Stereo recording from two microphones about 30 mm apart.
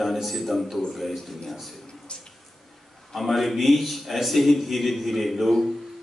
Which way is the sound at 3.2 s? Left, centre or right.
Centre.